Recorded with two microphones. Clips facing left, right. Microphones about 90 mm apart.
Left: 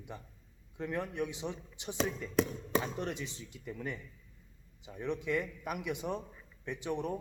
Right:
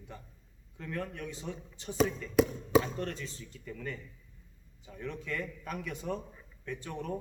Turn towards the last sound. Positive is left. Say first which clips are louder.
# left 3 dB
turn(degrees=15)  # may be behind; listen again after turning